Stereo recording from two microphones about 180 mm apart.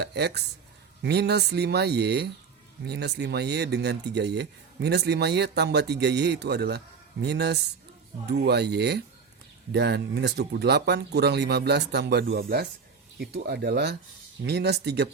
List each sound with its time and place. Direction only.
0.0 s speech: 65° right (ahead or behind)